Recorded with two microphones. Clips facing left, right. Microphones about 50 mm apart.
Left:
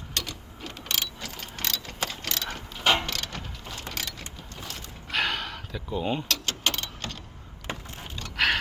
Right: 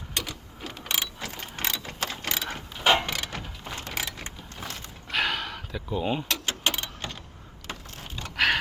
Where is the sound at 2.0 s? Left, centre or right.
Centre.